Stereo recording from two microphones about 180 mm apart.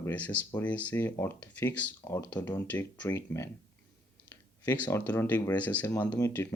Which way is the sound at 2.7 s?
10° left (ahead or behind).